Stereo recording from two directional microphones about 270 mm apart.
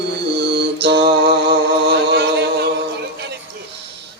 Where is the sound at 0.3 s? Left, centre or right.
Right.